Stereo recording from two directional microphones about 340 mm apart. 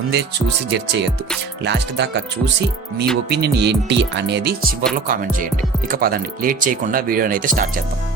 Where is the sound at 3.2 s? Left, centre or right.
Right.